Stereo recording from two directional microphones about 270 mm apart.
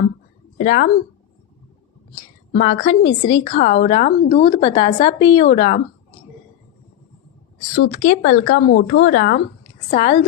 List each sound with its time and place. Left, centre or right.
0.6 s a woman's voice: left
2.1 s a woman's voice: left
3.4 s a woman's voice: left
7.9 s a woman's voice: left
8.4 s speech: left
9.9 s a woman's voice: left